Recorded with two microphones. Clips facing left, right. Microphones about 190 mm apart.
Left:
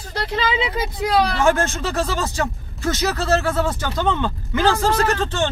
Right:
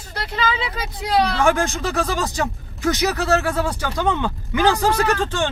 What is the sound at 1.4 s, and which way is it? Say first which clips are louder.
Speech: even; 15° right (ahead or behind).